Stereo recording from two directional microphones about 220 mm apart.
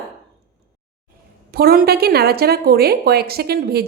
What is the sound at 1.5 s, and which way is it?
A woman's voice, 40° right (ahead or behind).